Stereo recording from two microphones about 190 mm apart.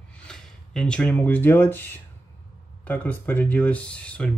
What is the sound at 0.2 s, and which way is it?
Speech, 5° left (ahead or behind).